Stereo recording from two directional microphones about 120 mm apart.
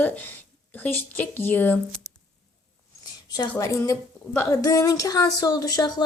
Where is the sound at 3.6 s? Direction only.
25° left (ahead or behind).